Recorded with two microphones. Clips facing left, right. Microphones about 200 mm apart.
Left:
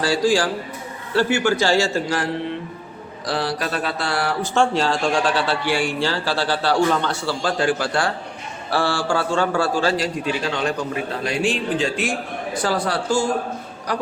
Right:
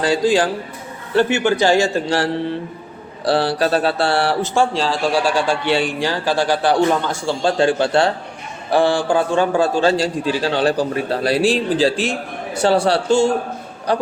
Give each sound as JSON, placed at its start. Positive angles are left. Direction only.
{"t": 0.0, "sound": "a man's voice", "side_deg": -20}
{"t": 3.2, "sound": "a man's voice", "side_deg": -30}
{"t": 4.5, "sound": "a man's voice", "side_deg": 0}